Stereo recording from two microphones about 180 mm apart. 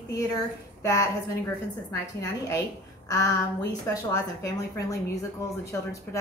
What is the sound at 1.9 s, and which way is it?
A woman's voice, 20° left (ahead or behind).